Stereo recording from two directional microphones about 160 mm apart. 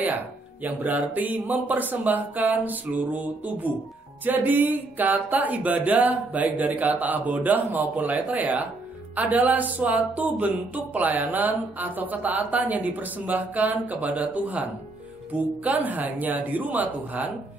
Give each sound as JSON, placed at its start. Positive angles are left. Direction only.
{"t": 0.7, "sound": "speech", "side_deg": -10}